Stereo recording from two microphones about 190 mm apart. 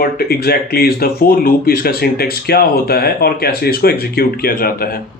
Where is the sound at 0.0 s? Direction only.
55° left (ahead or behind).